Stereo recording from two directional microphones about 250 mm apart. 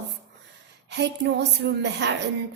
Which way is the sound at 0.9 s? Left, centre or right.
Right.